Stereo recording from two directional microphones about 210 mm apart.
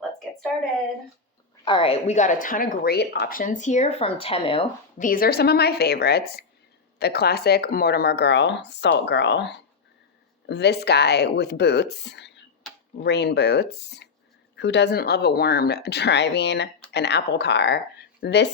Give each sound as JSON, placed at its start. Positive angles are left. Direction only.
{"t": 1.6, "sound": "speech", "side_deg": 25}
{"t": 4.9, "sound": "speech", "side_deg": 40}